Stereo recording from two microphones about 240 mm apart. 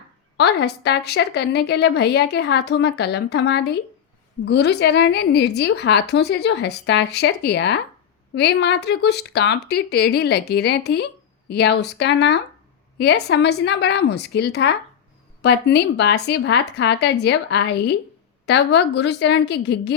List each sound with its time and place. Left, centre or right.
0.3 s a woman's voice: left